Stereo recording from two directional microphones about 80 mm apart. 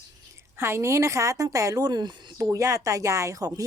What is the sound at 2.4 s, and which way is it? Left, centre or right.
Speech, right.